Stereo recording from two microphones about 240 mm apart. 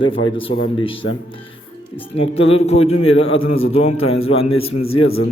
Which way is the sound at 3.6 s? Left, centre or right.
Left.